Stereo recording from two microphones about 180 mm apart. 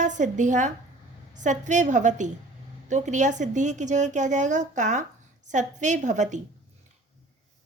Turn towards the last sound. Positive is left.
turn(degrees=-40)  # may be behind; listen again after turning